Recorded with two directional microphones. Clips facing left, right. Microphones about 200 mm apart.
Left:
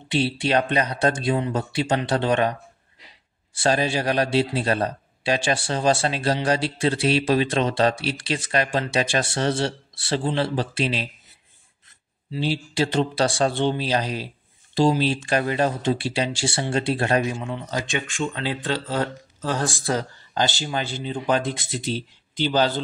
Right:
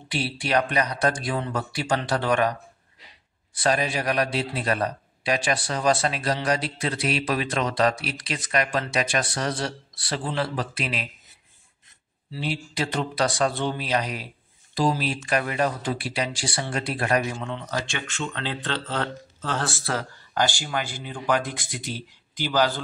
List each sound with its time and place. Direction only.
0.1 s a man's voice: 25° left (ahead or behind)
3.5 s a man's voice: 30° left (ahead or behind)
12.3 s a man's voice: 30° left (ahead or behind)
17.4 s a man's voice: 10° left (ahead or behind)